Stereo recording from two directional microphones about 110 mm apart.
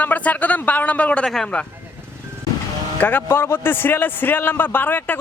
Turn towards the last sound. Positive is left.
turn(degrees=15)  # may be behind; listen again after turning